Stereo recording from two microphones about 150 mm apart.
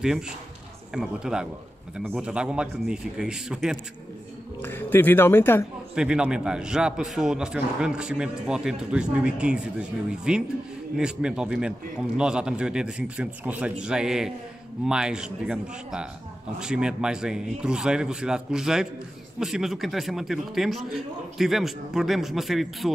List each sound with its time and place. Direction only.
0.9 s a man's voice: 5° right (ahead or behind)
4.6 s speech: 15° left (ahead or behind)
5.9 s a man's voice: 5° right (ahead or behind)